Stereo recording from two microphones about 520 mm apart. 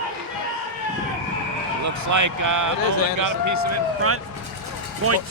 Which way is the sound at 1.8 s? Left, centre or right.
Right.